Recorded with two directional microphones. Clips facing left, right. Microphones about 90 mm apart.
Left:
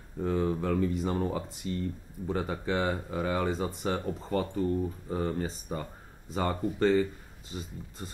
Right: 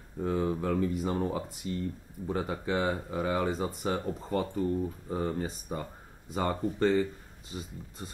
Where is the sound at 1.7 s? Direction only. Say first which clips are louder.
Left 2 dB; 20° right (ahead or behind).